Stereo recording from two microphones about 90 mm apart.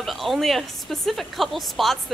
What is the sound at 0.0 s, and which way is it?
Speech, centre (ahead or behind).